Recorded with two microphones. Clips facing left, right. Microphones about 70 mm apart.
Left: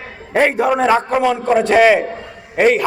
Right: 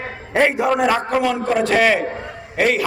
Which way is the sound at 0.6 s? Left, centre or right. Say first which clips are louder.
Left 3 dB; centre.